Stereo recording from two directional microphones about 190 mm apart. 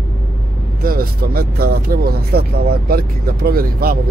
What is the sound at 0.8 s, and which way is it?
Speech, 50° right (ahead or behind).